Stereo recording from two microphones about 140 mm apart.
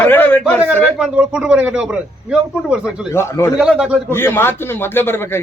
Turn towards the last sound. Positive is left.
turn(degrees=15)  # may be behind; listen again after turning